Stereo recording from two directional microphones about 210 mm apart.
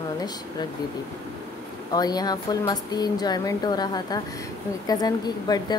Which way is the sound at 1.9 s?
20° left (ahead or behind).